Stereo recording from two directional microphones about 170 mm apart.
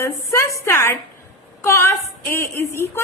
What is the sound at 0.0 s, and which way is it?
A woman's voice, 15° left (ahead or behind).